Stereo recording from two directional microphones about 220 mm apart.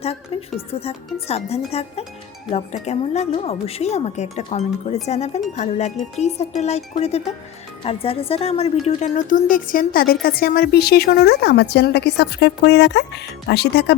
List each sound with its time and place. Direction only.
0.0 s a woman's voice: 25° left (ahead or behind); by 13.9 s 50° left (ahead or behind)